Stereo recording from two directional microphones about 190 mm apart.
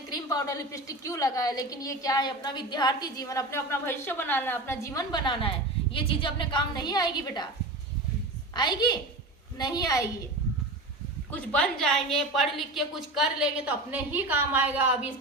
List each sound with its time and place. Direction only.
0.1 s a woman's voice: 20° left (ahead or behind)
8.5 s a woman's voice: 20° left (ahead or behind)
11.3 s a woman's voice: 5° left (ahead or behind)